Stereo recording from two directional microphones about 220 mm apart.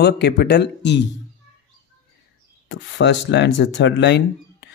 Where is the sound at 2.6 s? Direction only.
50° left (ahead or behind).